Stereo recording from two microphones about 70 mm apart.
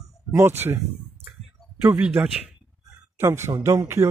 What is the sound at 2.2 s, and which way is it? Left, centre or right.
Speech, right.